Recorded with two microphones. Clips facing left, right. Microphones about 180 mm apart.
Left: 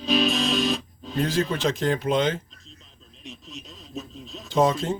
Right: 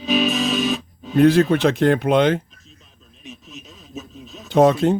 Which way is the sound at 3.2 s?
Centre (ahead or behind).